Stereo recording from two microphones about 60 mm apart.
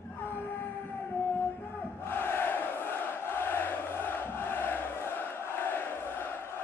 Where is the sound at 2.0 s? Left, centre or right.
Left.